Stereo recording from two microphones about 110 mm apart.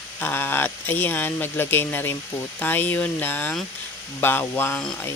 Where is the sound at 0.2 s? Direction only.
20° left (ahead or behind).